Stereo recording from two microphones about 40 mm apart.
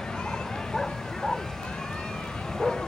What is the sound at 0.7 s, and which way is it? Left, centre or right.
Dog, centre.